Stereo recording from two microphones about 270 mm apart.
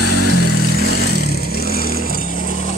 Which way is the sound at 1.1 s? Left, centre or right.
Right.